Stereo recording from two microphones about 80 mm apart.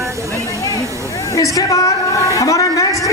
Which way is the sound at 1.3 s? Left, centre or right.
Left.